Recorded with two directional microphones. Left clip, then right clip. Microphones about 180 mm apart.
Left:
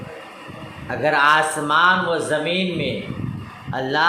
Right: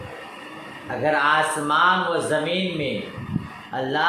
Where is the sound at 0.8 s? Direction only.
35° left (ahead or behind).